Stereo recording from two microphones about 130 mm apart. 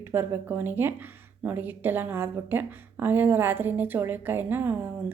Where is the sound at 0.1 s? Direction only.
15° right (ahead or behind).